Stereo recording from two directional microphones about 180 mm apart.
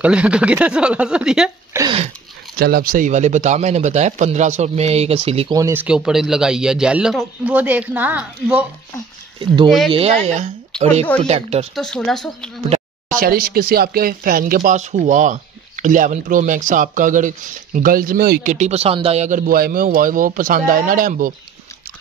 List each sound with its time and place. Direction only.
0.0 s a man's voice: 5° right (ahead or behind)
1.7 s a sound: 15° right (ahead or behind)
2.6 s speech: 55° right (ahead or behind); by 5.5 s 35° right (ahead or behind)
5.5 s a man's voice: 15° right (ahead or behind)
9.7 s a man's voice: centre (ahead or behind)
9.9 s speech: 35° right (ahead or behind)
11.7 s a man's voice: 5° left (ahead or behind)
13.1 s speech: 55° right (ahead or behind)